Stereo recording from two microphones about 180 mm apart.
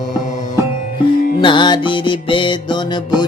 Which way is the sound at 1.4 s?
25° left (ahead or behind).